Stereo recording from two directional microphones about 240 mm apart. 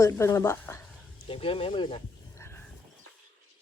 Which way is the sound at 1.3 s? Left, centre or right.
Left.